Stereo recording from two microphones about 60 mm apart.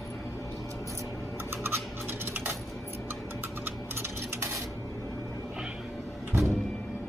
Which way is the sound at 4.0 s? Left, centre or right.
Right.